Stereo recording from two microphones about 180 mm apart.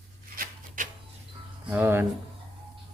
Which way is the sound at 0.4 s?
50° right (ahead or behind).